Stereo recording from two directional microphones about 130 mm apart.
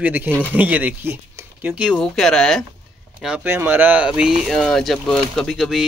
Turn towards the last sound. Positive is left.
turn(degrees=0)  # may be behind; listen again after turning